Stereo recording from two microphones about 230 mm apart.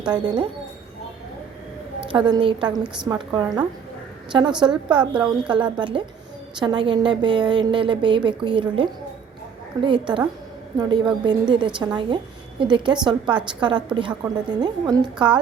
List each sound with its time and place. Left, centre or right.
0.0 s speech: centre
2.1 s a woman's voice: centre